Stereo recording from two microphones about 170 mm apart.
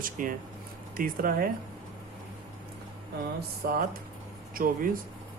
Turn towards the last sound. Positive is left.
turn(degrees=-55)  # may be behind; listen again after turning